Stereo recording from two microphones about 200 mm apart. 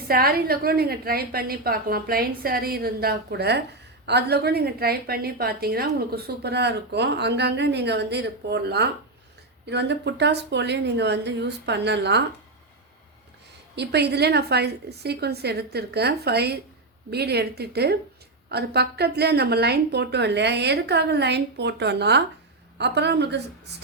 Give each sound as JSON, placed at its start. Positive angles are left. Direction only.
{"t": 0.1, "sound": "a woman's voice", "side_deg": -50}
{"t": 13.7, "sound": "a woman's voice", "side_deg": -55}